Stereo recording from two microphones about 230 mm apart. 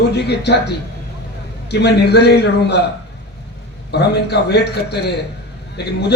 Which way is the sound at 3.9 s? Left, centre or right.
Left.